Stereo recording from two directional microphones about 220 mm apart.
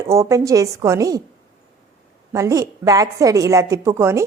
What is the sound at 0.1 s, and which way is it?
A woman's voice, 15° right (ahead or behind).